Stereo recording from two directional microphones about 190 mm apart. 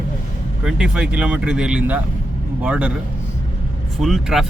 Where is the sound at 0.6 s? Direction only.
5° right (ahead or behind).